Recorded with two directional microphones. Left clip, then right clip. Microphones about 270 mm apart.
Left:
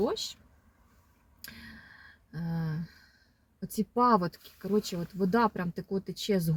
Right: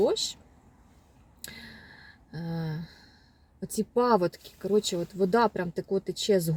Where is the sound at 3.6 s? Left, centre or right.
Right.